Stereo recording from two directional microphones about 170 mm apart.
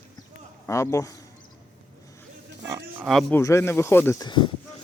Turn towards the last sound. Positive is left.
turn(degrees=25)  # may be behind; listen again after turning